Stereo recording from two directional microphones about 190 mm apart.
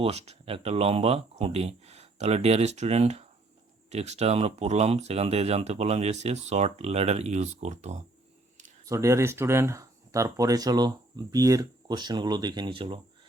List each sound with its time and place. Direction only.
0.0 s speech: 35° right (ahead or behind)
8.9 s speech: 15° right (ahead or behind)